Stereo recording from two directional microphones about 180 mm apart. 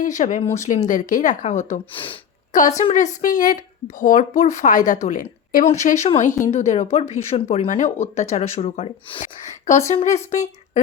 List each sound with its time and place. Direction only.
0.0 s a woman's voice: 45° left (ahead or behind)